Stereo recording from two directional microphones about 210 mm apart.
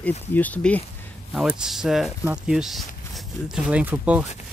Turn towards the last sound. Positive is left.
turn(degrees=-5)  # may be behind; listen again after turning